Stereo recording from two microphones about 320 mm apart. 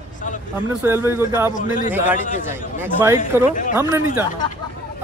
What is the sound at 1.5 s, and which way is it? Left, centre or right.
Speech, left.